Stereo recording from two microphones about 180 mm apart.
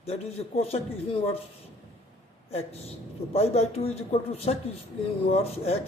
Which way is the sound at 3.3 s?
35° left (ahead or behind).